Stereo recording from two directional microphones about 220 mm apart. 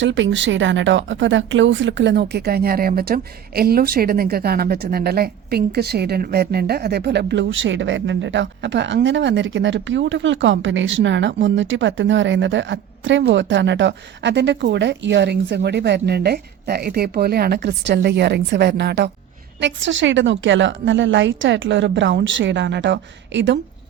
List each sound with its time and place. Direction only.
0.0 s a woman's voice: 55° right (ahead or behind)